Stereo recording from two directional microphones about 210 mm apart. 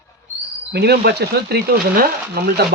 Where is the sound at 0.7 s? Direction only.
50° right (ahead or behind).